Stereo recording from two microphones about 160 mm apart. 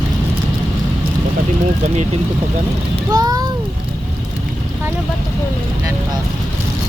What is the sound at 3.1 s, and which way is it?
Speech, 25° right (ahead or behind).